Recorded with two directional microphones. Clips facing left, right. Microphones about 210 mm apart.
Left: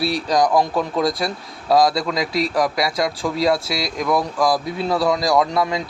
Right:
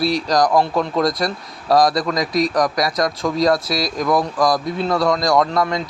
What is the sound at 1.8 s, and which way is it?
Speech, 25° left (ahead or behind).